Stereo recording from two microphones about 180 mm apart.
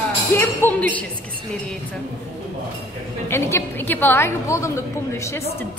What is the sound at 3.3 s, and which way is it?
A woman's voice, 15° left (ahead or behind).